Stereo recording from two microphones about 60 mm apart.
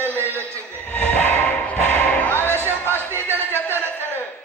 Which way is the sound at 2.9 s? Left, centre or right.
Right.